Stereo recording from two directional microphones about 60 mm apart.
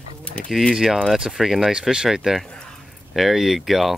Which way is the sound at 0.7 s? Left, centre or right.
Centre.